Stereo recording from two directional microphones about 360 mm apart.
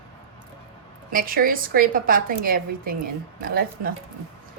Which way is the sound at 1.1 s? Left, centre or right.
Right.